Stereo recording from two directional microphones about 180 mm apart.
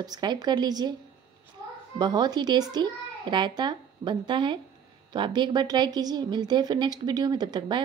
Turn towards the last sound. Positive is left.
turn(degrees=-25)  # may be behind; listen again after turning